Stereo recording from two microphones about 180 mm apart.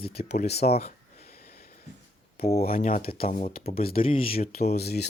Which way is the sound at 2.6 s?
50° left (ahead or behind).